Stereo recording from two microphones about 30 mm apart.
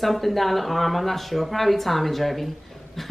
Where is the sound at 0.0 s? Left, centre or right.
Centre.